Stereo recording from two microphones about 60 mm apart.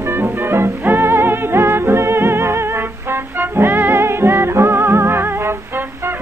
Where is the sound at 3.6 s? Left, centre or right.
Right.